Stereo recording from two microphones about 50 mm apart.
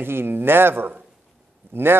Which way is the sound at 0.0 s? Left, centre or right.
Right.